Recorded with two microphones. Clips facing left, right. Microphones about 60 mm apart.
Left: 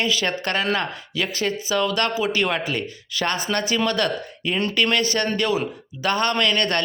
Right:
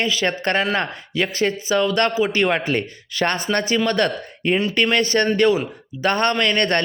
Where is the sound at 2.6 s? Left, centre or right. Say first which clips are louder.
Right 4 dB; right.